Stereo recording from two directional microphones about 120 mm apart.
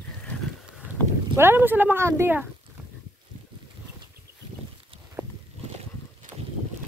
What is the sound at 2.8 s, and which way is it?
Boat, 10° right (ahead or behind).